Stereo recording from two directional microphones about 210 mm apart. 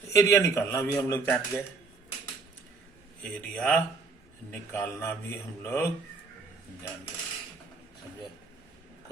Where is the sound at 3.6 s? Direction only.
5° left (ahead or behind).